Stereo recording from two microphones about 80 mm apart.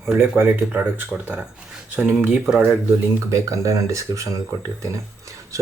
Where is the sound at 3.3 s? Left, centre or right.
Right.